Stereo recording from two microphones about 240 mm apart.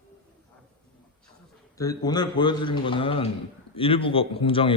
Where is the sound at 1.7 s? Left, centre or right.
Centre.